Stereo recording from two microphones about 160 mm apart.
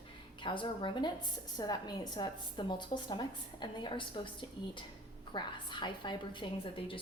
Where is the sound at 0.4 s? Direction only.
30° left (ahead or behind).